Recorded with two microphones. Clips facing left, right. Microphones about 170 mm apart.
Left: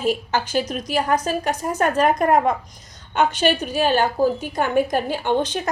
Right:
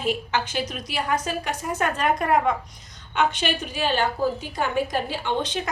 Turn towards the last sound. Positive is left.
turn(degrees=45)  # may be behind; listen again after turning